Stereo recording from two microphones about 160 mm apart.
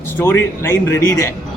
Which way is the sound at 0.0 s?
15° left (ahead or behind).